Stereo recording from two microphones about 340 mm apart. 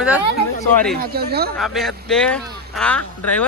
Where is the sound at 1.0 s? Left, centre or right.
Right.